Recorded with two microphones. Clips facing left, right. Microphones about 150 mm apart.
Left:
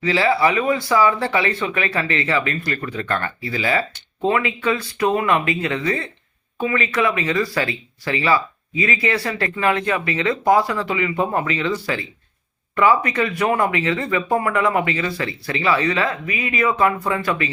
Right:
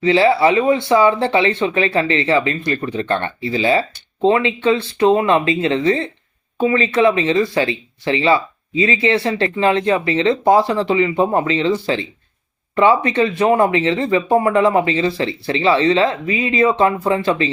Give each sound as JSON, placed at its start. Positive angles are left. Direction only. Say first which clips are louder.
{"t": 0.0, "sound": "speech", "louder": "right 5 dB", "side_deg": -25}